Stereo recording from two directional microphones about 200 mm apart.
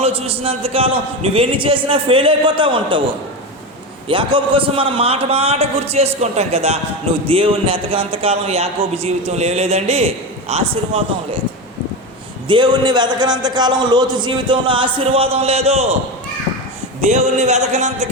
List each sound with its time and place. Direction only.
0.0 s a man's voice: 30° right (ahead or behind)
4.1 s a man's voice: 25° right (ahead or behind)
12.5 s a man's voice: 20° right (ahead or behind)
17.0 s a man's voice: 35° right (ahead or behind)